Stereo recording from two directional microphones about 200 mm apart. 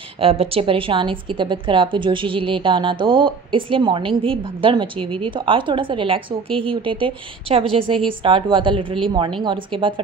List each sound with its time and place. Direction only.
0.2 s a woman's voice: 30° right (ahead or behind)